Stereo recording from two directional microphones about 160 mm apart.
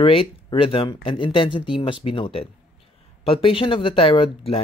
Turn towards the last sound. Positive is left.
turn(degrees=35)  # may be behind; listen again after turning